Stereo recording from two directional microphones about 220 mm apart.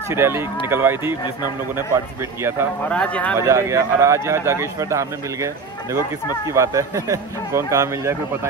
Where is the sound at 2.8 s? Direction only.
5° left (ahead or behind).